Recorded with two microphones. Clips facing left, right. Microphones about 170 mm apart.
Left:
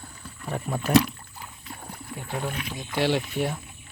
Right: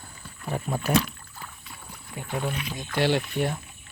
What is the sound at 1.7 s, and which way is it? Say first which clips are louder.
Rowboat: left 5 dB; 45° left (ahead or behind).